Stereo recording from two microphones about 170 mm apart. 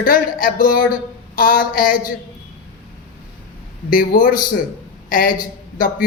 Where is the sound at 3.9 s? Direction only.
55° left (ahead or behind).